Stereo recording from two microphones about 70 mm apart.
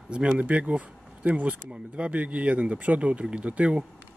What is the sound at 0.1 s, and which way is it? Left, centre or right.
Speech, centre.